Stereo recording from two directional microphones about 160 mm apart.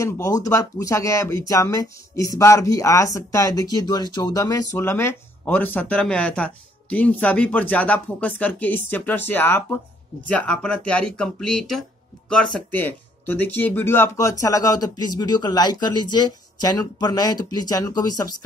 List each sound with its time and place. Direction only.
0.0 s speech: 20° left (ahead or behind)
13.3 s speech: 10° left (ahead or behind)